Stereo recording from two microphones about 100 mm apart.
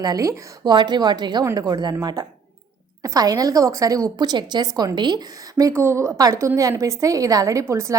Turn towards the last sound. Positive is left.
turn(degrees=-30)  # may be behind; listen again after turning